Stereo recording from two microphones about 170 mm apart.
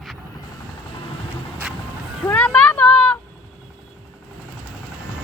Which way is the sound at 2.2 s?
5° left (ahead or behind).